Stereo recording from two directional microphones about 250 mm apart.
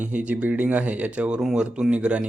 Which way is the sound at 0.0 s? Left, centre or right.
Centre.